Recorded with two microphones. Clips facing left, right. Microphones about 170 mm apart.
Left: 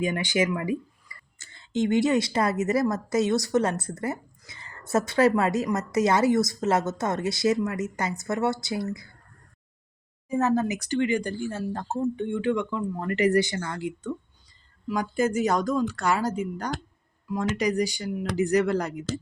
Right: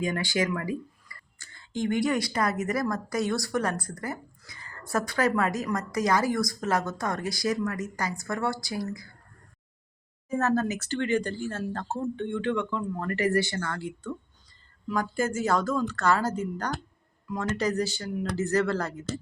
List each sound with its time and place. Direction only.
0.0 s speech: 20° left (ahead or behind)
10.2 s speech: 15° left (ahead or behind)